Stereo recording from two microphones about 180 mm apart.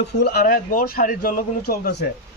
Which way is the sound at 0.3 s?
60° left (ahead or behind).